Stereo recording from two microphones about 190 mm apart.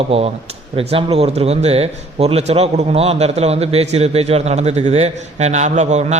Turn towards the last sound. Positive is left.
turn(degrees=-35)  # may be behind; listen again after turning